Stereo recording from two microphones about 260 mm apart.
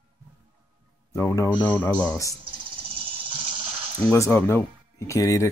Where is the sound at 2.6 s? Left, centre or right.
Centre.